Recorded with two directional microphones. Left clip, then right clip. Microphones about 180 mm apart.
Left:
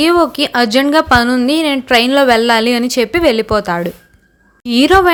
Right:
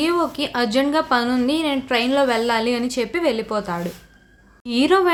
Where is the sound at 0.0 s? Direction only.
40° left (ahead or behind).